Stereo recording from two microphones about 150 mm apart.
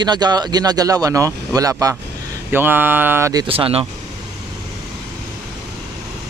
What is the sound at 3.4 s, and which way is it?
Speech, 40° right (ahead or behind).